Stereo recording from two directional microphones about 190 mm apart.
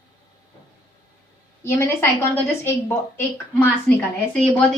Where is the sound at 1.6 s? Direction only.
15° left (ahead or behind).